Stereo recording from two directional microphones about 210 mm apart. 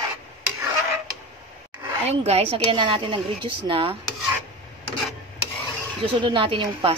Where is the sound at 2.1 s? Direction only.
30° right (ahead or behind).